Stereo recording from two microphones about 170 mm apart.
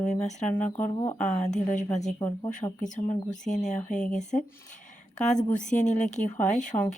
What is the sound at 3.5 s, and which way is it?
Speech, 45° left (ahead or behind).